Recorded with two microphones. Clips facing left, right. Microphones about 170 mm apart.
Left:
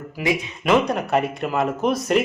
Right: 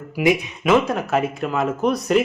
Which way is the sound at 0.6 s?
Centre (ahead or behind).